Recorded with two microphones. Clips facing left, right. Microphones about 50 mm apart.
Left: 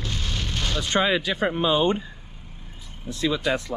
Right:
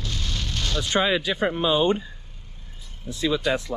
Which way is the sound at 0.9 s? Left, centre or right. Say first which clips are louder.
Even; left.